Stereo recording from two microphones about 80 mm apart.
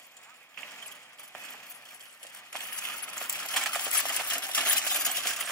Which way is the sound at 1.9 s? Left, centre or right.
Centre.